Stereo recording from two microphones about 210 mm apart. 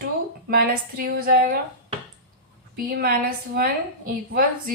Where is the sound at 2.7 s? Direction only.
45° right (ahead or behind).